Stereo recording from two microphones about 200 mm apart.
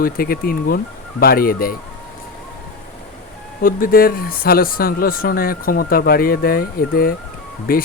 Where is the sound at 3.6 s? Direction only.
45° left (ahead or behind).